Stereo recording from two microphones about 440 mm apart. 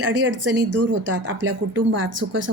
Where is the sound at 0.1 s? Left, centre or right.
Right.